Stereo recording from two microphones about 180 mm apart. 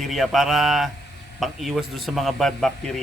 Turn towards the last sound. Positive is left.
turn(degrees=0)  # may be behind; listen again after turning